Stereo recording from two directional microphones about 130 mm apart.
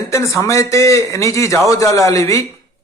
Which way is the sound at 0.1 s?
25° left (ahead or behind).